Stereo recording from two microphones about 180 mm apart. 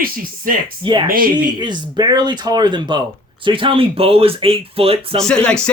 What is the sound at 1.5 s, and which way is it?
Speech, 25° right (ahead or behind).